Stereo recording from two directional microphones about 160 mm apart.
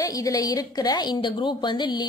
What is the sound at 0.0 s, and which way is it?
A woman's voice, 20° left (ahead or behind).